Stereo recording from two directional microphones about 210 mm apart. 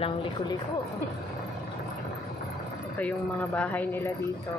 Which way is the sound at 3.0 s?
5° left (ahead or behind).